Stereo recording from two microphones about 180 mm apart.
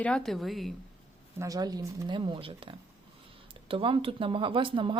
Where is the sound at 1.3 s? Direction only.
20° right (ahead or behind).